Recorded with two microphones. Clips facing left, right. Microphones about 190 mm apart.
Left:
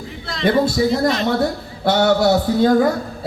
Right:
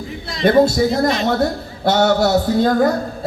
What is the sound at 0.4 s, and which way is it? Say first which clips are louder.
A man's voice: right 3 dB; 45° right (ahead or behind).